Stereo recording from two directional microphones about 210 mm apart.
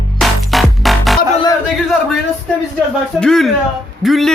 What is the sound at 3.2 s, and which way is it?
A man's voice, centre (ahead or behind).